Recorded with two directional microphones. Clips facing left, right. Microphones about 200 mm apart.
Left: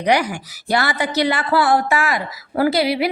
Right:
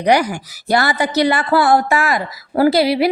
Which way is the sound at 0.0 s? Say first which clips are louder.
Right 3 dB; 40° right (ahead or behind).